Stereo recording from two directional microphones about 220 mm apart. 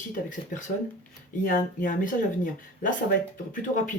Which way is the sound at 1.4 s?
35° left (ahead or behind).